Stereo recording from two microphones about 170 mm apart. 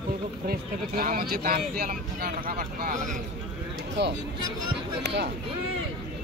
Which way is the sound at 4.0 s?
90° right.